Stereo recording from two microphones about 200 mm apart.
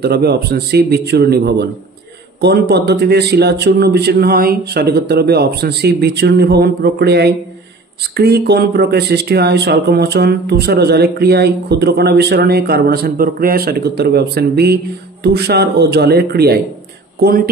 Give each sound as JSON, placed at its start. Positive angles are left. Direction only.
{"t": 0.0, "sound": "speech", "side_deg": -55}